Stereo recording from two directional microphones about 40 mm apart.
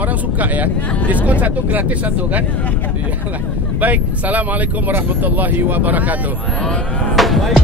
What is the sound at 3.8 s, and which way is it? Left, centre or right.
Speech, right.